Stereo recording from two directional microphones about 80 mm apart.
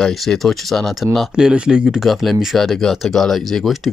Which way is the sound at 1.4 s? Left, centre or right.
Centre.